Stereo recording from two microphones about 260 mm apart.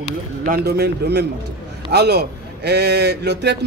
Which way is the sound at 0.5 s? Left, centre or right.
Right.